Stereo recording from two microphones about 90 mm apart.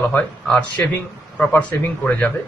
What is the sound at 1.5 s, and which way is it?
Speech, 15° left (ahead or behind).